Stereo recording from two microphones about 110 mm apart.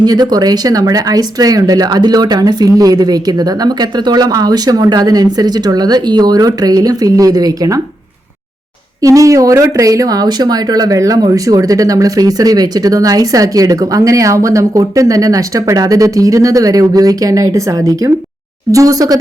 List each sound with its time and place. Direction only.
0.0 s speech: 40° right (ahead or behind)
9.0 s speech: 30° right (ahead or behind)